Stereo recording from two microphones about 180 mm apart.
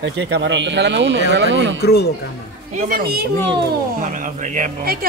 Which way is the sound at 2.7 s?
50° right (ahead or behind).